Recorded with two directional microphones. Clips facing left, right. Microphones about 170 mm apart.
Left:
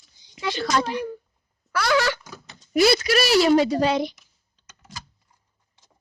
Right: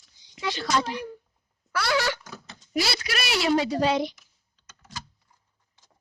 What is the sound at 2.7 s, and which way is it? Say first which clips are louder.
A woman's voice: left 10 dB; 55° left (ahead or behind).